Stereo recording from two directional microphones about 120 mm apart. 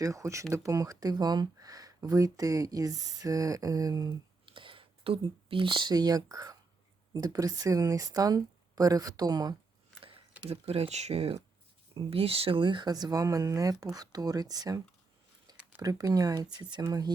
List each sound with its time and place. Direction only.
0.0 s speech: 25° right (ahead or behind)
4.4 s speech: 45° right (ahead or behind)
10.4 s speech: 60° right (ahead or behind); by 14.8 s 30° right (ahead or behind)
15.8 s speech: 30° right (ahead or behind)